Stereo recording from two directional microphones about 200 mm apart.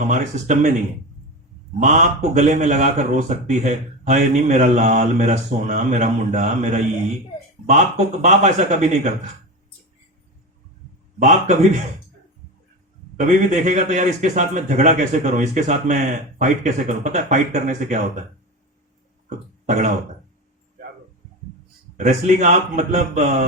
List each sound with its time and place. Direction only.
0.0 s a man's voice: 40° right (ahead or behind)
1.8 s a man's voice: 35° right (ahead or behind)
11.2 s a man's voice: 35° right (ahead or behind)
13.1 s a man's voice: 35° right (ahead or behind)
19.6 s speech: 35° right (ahead or behind)
21.9 s a man's voice: 35° right (ahead or behind)